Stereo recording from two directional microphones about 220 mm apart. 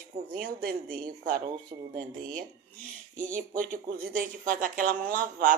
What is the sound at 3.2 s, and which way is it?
Speech, 35° right (ahead or behind).